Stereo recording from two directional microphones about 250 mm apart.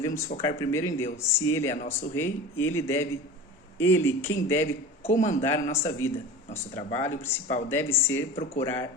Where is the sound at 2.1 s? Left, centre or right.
Centre.